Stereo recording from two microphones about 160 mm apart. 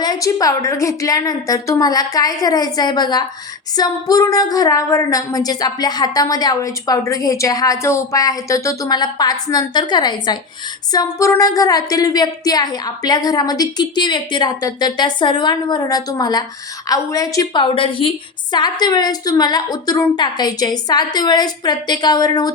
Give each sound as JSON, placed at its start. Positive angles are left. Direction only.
{"t": 0.0, "sound": "a woman's voice", "side_deg": 25}